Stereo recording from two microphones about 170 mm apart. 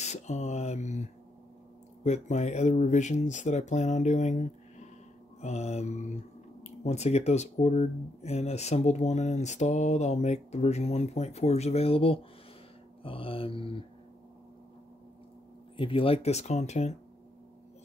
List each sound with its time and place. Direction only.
0.0 s speech: 40° left (ahead or behind)
15.7 s speech: 30° left (ahead or behind)